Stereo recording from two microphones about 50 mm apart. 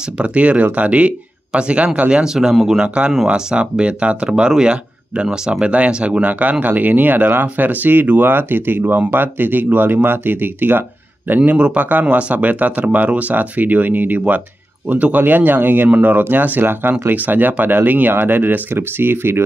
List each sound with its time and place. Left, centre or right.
0.2 s speech: right
6.6 s speech: right
11.5 s speech: right